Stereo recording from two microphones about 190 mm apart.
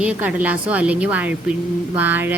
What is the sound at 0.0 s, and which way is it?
A woman's voice, 5° right (ahead or behind).